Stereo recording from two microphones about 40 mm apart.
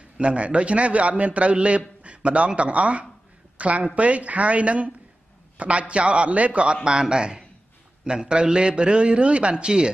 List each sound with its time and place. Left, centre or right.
0.2 s a man's voice: right